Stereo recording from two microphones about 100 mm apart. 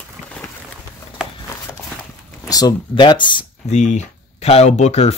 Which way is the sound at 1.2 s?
10° right (ahead or behind).